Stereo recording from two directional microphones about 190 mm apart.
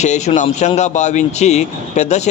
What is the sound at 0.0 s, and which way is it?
Speech, 35° left (ahead or behind).